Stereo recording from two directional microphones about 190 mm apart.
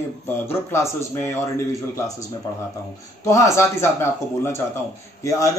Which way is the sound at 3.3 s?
15° left (ahead or behind).